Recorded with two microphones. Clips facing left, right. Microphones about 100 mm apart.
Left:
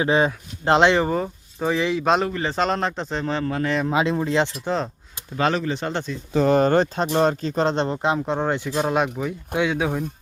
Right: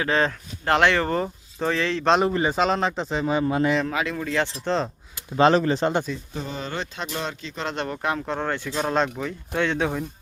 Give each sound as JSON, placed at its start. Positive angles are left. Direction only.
{"t": 0.0, "sound": "speech", "side_deg": 15}
{"t": 1.0, "sound": "speech", "side_deg": 5}
{"t": 2.4, "sound": "speech", "side_deg": -5}
{"t": 3.8, "sound": "speech", "side_deg": 25}
{"t": 4.6, "sound": "speech", "side_deg": 5}
{"t": 5.4, "sound": "speech", "side_deg": -30}
{"t": 6.3, "sound": "speech", "side_deg": 70}
{"t": 7.9, "sound": "speech", "side_deg": 20}